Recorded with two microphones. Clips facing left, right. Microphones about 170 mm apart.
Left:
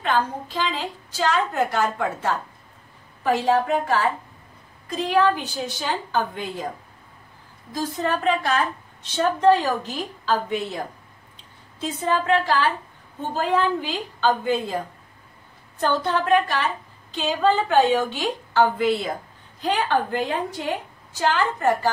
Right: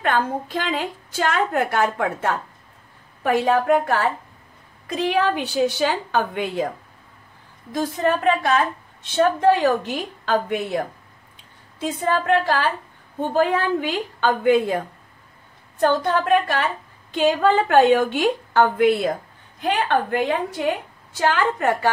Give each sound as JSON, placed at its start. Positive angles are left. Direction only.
{"t": 0.0, "sound": "a woman's voice", "side_deg": -55}
{"t": 7.7, "sound": "a woman's voice", "side_deg": -60}
{"t": 11.8, "sound": "a woman's voice", "side_deg": -55}
{"t": 16.0, "sound": "a woman's voice", "side_deg": -50}